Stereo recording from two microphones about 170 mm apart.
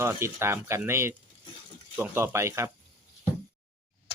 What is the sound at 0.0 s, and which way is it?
Speech, 15° right (ahead or behind).